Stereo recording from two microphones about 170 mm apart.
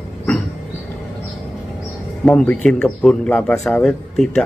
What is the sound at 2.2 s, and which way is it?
A man's voice, 5° left (ahead or behind).